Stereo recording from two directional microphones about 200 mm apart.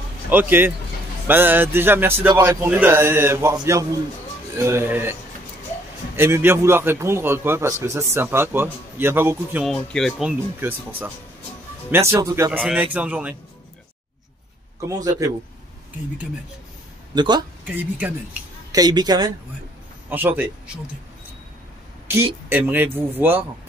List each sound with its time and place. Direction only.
0.3 s a man's voice: 10° right (ahead or behind)
6.1 s a man's voice: 10° right (ahead or behind)
9.7 s a man's voice: centre (ahead or behind); by 12.5 s 15° right (ahead or behind)
12.5 s a man's voice: 5° right (ahead or behind)
14.9 s a man's voice: 15° right (ahead or behind)
17.1 s a woman's voice: 20° right (ahead or behind)
17.6 s a man's voice: 10° right (ahead or behind)
18.7 s a woman's voice: 20° right (ahead or behind)
20.1 s a man's voice: 10° right (ahead or behind)
22.0 s a man's voice: 10° right (ahead or behind)